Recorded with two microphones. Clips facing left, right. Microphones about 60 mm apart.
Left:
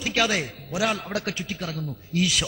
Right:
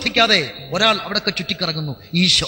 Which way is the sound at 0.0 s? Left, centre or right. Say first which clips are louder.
Right 7 dB; right.